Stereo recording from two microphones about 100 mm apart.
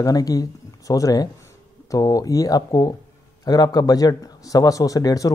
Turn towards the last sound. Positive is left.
turn(degrees=35)  # may be behind; listen again after turning